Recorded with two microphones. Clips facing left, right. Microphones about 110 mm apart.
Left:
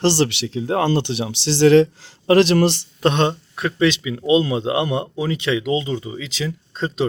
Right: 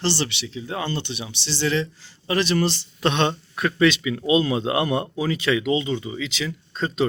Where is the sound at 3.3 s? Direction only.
25° left (ahead or behind).